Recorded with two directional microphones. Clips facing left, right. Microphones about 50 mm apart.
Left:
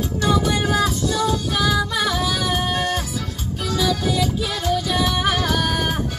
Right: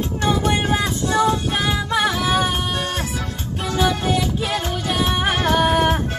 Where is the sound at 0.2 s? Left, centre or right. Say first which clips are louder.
Even; right.